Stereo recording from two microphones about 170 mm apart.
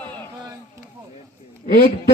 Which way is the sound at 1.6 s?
55° left (ahead or behind).